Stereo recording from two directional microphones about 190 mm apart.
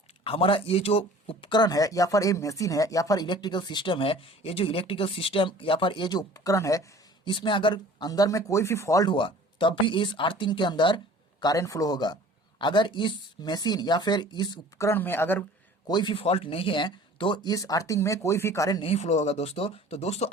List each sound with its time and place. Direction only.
0.3 s speech: 30° left (ahead or behind); by 15.4 s 10° left (ahead or behind)
15.9 s speech: 25° left (ahead or behind)
18.9 s speech: 35° left (ahead or behind)